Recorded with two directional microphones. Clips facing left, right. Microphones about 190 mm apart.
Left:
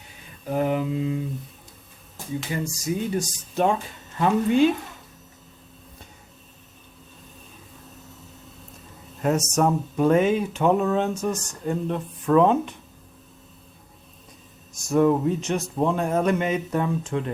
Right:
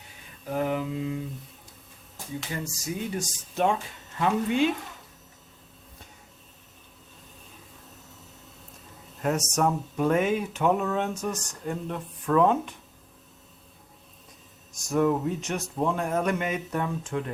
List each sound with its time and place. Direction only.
0.4 s mantra: 20° left (ahead or behind)
2.5 s speech: 15° left (ahead or behind)
3.2 s speech: 35° left (ahead or behind)
9.2 s speech: 25° left (ahead or behind)
14.8 s speech: 25° left (ahead or behind)